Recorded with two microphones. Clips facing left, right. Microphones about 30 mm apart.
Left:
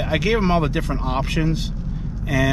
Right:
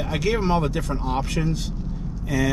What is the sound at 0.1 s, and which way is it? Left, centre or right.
Speech, left.